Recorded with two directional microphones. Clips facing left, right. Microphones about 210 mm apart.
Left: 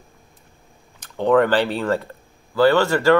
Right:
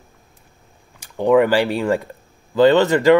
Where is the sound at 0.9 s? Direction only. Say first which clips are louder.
Right 2 dB; 10° right (ahead or behind).